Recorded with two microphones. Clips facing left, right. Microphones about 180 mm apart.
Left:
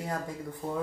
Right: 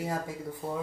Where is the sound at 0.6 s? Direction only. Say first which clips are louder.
Left 1 dB; 5° right (ahead or behind).